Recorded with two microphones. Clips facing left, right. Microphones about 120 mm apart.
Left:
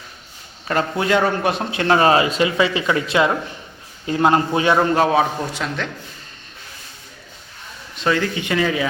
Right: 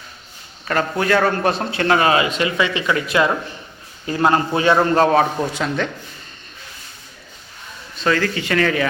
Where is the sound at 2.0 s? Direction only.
35° left (ahead or behind); by 5.9 s centre (ahead or behind).